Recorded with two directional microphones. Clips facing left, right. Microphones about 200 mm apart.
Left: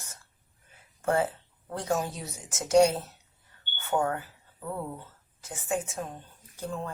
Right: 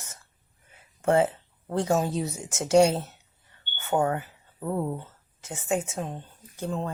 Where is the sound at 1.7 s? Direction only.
25° right (ahead or behind).